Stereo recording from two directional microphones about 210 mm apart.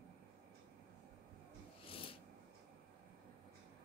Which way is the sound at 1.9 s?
25° left (ahead or behind).